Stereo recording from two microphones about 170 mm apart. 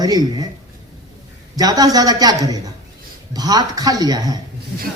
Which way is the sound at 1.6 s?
20° right (ahead or behind).